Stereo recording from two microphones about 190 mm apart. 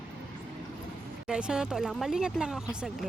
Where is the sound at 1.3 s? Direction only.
5° right (ahead or behind).